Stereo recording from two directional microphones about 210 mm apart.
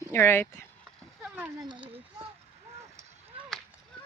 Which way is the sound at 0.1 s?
10° left (ahead or behind).